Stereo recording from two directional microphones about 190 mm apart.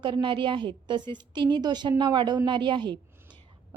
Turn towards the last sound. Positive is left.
turn(degrees=-25)  # may be behind; listen again after turning